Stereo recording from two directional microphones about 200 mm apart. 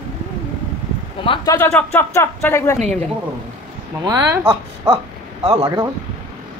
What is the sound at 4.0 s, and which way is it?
Speech, 15° right (ahead or behind).